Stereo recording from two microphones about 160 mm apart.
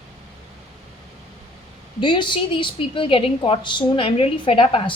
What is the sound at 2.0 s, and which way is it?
A woman's voice, 30° left (ahead or behind).